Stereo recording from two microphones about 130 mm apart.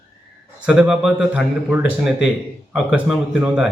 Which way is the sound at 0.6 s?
5° right (ahead or behind).